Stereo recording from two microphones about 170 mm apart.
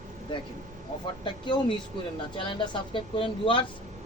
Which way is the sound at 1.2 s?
30° left (ahead or behind).